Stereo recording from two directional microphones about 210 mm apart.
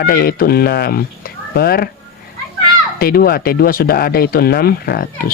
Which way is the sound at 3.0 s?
45° left (ahead or behind).